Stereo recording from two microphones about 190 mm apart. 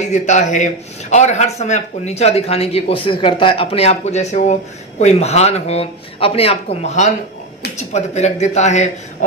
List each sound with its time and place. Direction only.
0.0 s speech: 40° left (ahead or behind)